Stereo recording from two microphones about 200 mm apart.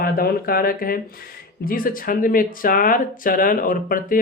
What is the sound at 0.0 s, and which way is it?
Speech, 45° left (ahead or behind).